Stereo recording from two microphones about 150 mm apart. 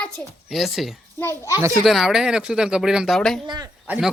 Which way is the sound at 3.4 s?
30° right (ahead or behind).